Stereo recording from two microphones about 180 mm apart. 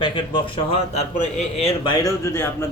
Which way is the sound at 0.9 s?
35° left (ahead or behind).